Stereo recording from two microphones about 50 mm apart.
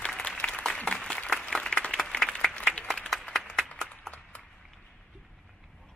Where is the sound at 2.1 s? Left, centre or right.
Centre.